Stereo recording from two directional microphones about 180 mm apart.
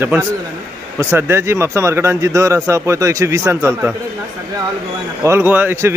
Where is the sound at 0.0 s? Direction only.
10° right (ahead or behind).